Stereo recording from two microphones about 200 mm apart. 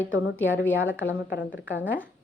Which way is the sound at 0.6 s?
75° left (ahead or behind).